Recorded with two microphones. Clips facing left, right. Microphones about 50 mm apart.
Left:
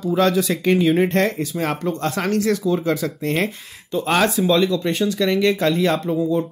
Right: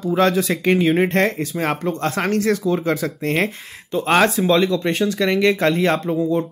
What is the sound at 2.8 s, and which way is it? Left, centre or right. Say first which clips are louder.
Speech: even; right.